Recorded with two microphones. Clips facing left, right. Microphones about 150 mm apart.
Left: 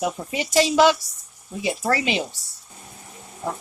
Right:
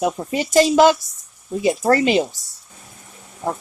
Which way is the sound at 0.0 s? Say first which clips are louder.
Right 5 dB; 45° right (ahead or behind).